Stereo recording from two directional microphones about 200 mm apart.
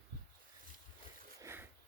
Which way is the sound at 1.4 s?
10° right (ahead or behind).